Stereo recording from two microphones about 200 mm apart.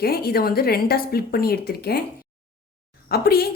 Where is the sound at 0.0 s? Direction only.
50° left (ahead or behind).